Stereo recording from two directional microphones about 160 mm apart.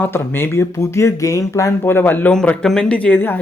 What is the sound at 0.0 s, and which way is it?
Speech, 15° left (ahead or behind).